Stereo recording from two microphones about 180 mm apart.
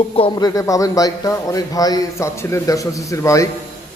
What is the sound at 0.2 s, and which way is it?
A man's voice, 25° left (ahead or behind).